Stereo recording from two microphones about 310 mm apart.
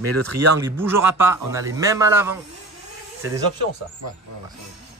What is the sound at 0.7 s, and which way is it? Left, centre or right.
Speech, centre.